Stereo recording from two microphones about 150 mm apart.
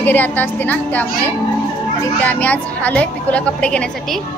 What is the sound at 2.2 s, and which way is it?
A woman's voice, 10° left (ahead or behind).